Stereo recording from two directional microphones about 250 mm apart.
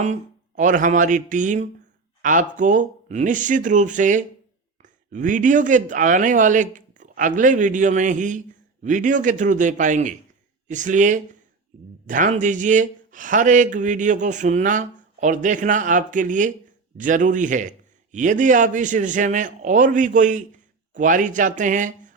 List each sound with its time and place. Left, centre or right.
0.0 s speech: right